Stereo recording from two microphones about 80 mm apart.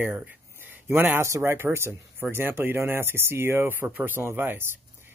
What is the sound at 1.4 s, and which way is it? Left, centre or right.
Speech, right.